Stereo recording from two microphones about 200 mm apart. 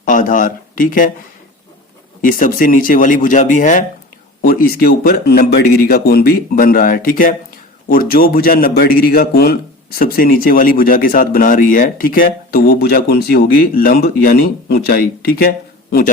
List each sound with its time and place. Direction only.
0.0 s speech: 40° left (ahead or behind)
2.2 s a man's voice: 45° left (ahead or behind)